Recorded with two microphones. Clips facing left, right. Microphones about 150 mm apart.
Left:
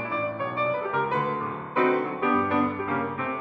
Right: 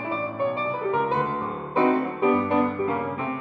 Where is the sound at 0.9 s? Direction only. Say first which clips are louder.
Right 2 dB; 20° right (ahead or behind).